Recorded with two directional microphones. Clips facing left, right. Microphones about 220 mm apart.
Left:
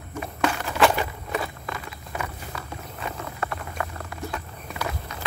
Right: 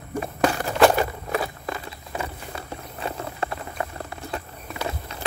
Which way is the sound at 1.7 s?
30° right (ahead or behind).